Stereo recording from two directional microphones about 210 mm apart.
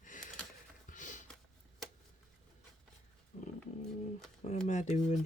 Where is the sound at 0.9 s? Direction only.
35° left (ahead or behind).